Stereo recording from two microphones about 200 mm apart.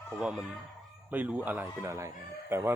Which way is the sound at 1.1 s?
10° right (ahead or behind).